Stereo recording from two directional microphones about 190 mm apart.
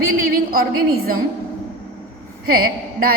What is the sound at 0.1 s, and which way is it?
A woman's voice, 50° right (ahead or behind).